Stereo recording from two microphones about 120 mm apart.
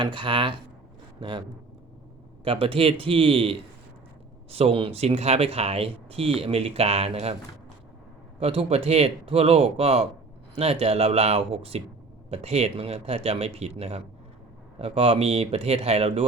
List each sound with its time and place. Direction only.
0.0 s speech: 40° right (ahead or behind)
2.4 s speech: 50° right (ahead or behind)
8.4 s speech: 55° right (ahead or behind)